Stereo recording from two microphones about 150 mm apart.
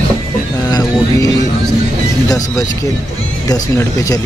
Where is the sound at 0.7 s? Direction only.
25° left (ahead or behind).